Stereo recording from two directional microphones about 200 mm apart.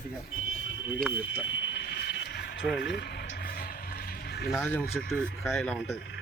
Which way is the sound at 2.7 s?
55° left (ahead or behind).